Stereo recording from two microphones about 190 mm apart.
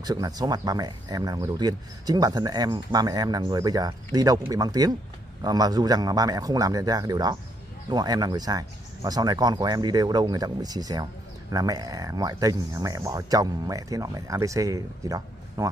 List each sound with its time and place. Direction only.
0.0 s speech: 20° right (ahead or behind)